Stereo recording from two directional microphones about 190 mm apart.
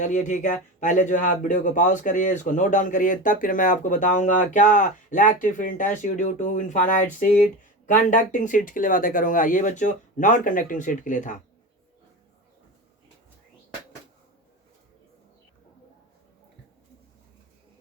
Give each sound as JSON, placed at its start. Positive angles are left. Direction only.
{"t": 0.0, "sound": "speech", "side_deg": 40}